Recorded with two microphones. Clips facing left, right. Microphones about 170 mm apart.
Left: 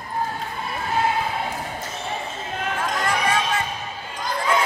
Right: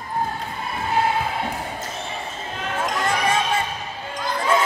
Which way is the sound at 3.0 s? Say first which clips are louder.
Right 1 dB; 25° right (ahead or behind).